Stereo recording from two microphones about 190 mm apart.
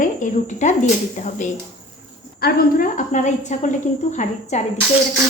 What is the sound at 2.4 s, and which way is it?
A woman's voice, 50° left (ahead or behind).